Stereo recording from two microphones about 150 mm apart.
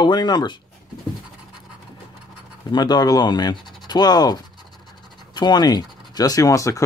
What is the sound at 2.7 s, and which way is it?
Speech, 30° left (ahead or behind).